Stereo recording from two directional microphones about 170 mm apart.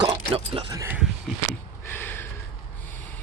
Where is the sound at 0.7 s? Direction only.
15° right (ahead or behind).